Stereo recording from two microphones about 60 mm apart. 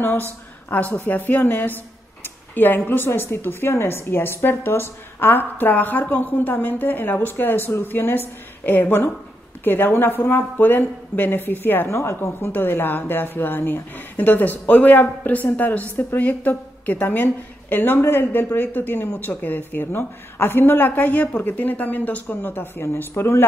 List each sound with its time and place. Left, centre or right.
0.0 s a woman's voice: left
2.2 s a sound: left
2.9 s a woman's voice: left
11.9 s a woman's voice: left